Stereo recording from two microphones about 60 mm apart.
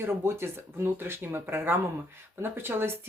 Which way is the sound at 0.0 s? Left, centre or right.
Right.